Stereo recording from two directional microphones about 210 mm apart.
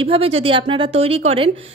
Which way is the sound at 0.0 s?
25° right (ahead or behind).